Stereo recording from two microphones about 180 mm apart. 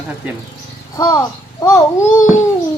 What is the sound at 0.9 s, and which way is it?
A child's voice, 20° left (ahead or behind).